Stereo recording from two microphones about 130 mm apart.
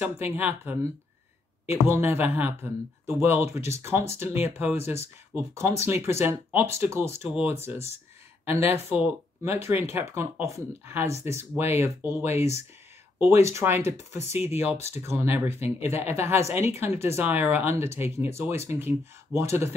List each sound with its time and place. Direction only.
0.0 s speech: 15° right (ahead or behind)
1.9 s speech: 15° right (ahead or behind)
8.7 s speech: 15° right (ahead or behind)
14.3 s speech: 55° left (ahead or behind)
14.6 s speech: 20° right (ahead or behind)
15.6 s speech: 55° left (ahead or behind)
16.0 s speech: 15° right (ahead or behind)